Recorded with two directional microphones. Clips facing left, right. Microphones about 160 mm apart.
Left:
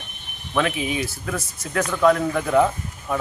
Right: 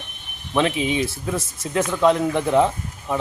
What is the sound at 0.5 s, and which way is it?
Speech, 25° right (ahead or behind).